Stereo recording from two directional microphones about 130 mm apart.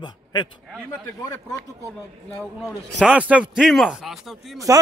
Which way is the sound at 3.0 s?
10° right (ahead or behind).